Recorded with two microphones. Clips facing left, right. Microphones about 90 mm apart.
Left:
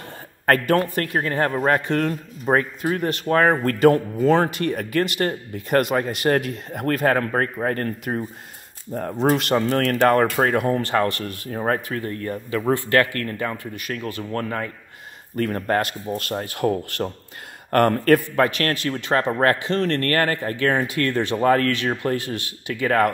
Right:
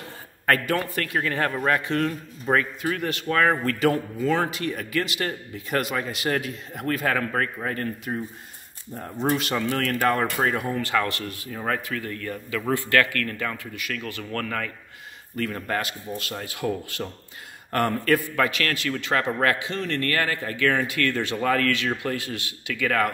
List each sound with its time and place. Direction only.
0.5 s speech: 45° left (ahead or behind)
1.9 s speech: 45° left (ahead or behind)
2.4 s speech: 30° left (ahead or behind)
4.5 s speech: 55° left (ahead or behind); by 14.7 s 25° left (ahead or behind)
15.3 s speech: 40° left (ahead or behind)
18.3 s speech: 35° left (ahead or behind)
19.7 s speech: 60° left (ahead or behind); by 23.1 s 35° left (ahead or behind)